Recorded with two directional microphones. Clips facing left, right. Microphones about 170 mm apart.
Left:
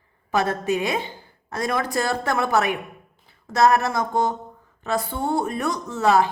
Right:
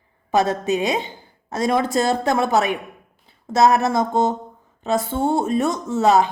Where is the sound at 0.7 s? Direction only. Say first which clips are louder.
Right 2 dB; 20° right (ahead or behind).